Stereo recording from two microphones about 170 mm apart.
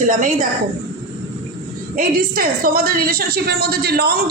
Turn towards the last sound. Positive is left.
turn(degrees=-65)  # may be behind; listen again after turning